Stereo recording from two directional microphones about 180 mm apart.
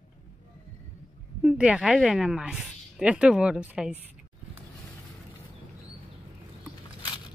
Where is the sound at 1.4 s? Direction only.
5° right (ahead or behind).